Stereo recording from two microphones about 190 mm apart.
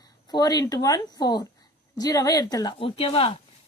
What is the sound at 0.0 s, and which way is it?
Speech, 20° left (ahead or behind).